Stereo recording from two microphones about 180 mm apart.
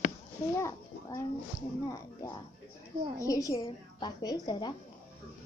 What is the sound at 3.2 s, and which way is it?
A child's voice, 20° left (ahead or behind).